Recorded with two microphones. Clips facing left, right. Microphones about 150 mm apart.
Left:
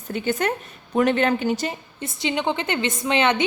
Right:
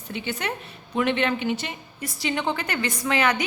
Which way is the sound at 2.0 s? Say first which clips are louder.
Left 2 dB; 20° left (ahead or behind).